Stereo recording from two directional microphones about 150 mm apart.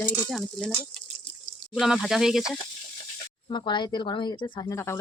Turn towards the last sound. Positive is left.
turn(degrees=15)  # may be behind; listen again after turning